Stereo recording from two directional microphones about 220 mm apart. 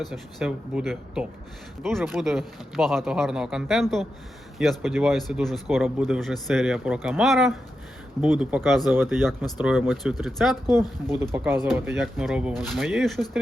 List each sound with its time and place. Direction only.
0.1 s speech: centre (ahead or behind)
10.7 s speech: 20° left (ahead or behind)
11.1 s speech: 10° right (ahead or behind)